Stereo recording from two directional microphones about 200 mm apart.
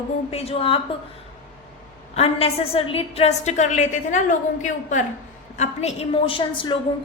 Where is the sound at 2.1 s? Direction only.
30° left (ahead or behind).